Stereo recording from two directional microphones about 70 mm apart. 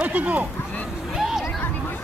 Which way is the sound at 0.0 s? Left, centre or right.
Right.